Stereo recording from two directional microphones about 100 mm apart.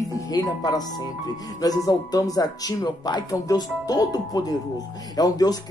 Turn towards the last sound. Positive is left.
turn(degrees=40)  # may be behind; listen again after turning